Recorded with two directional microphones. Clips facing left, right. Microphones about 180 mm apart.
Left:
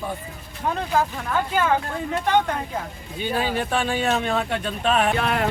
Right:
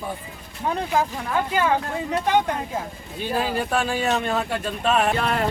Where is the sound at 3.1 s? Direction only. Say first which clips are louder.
Even; centre (ahead or behind).